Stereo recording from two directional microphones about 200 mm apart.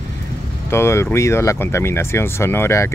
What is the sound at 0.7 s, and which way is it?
Speech, 15° left (ahead or behind).